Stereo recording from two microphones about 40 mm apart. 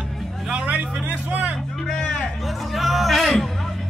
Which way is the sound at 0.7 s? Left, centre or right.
Right.